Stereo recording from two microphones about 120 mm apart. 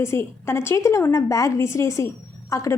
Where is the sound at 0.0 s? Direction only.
20° left (ahead or behind).